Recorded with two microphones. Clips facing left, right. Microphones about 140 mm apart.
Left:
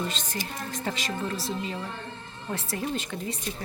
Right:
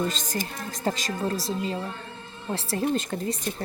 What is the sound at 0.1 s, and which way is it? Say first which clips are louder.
Speech: right 3 dB; 40° right (ahead or behind).